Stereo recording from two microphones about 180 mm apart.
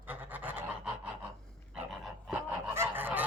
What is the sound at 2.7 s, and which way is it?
Goose, 10° right (ahead or behind).